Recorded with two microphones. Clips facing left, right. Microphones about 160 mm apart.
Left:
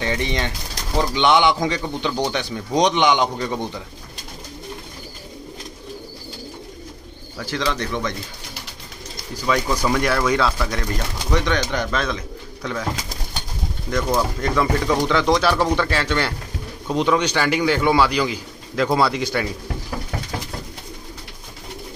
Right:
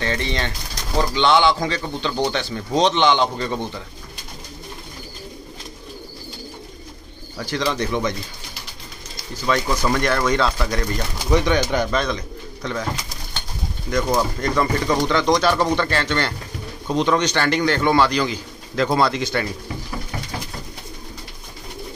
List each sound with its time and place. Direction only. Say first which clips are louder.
0.0 s a man's voice: left 1 dB; 15° left (ahead or behind)
7.3 s speech: right 1 dB; centre (ahead or behind)
7.7 s speech: right 3 dB; 15° right (ahead or behind)
9.8 s speech: even; 5° left (ahead or behind)
11.3 s speech: right 3 dB; 10° right (ahead or behind)
12.6 s a man's voice: even; 5° left (ahead or behind)
13.8 s a man's voice: right 1 dB; centre (ahead or behind)